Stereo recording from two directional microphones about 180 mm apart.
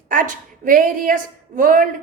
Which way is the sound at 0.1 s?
50° right (ahead or behind).